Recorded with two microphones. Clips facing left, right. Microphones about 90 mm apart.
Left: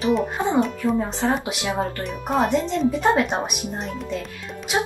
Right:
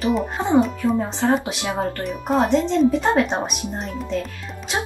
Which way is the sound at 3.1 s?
15° left (ahead or behind).